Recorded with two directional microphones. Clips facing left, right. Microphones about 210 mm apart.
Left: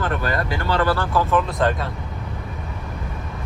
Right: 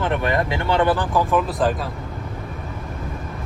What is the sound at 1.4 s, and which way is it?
Speech, centre (ahead or behind).